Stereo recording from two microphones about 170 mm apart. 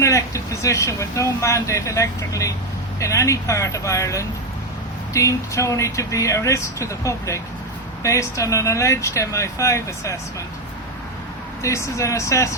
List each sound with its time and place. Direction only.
0.0 s speech: 20° left (ahead or behind)
11.6 s speech: 15° left (ahead or behind)